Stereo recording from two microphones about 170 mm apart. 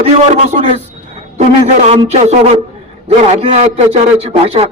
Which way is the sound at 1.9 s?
40° right (ahead or behind).